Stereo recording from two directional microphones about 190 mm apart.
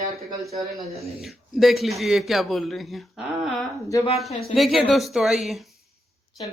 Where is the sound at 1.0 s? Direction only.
Centre (ahead or behind).